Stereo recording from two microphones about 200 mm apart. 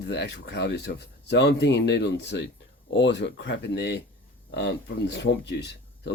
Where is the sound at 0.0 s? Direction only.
60° left (ahead or behind).